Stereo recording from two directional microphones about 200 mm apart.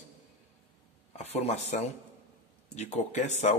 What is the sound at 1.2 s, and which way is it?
Speech, 30° left (ahead or behind).